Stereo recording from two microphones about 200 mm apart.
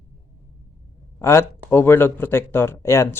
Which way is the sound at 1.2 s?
15° left (ahead or behind).